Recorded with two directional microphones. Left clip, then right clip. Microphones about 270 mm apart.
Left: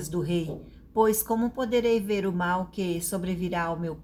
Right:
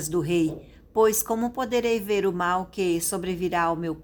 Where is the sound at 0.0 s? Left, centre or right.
Right.